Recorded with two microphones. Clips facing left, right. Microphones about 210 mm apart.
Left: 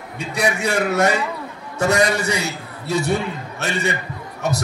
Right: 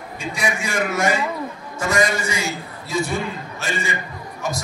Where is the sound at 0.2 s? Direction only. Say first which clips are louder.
Left 4 dB; 65° left (ahead or behind).